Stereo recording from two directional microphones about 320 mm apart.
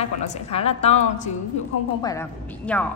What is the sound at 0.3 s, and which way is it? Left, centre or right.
A woman's voice, centre.